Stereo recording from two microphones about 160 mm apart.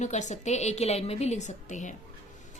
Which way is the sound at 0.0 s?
45° left (ahead or behind).